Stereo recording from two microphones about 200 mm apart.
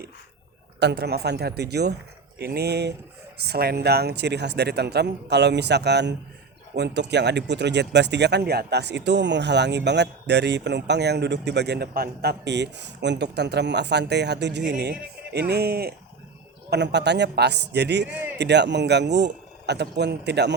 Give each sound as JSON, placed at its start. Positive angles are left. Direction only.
{"t": 0.8, "sound": "speech", "side_deg": -55}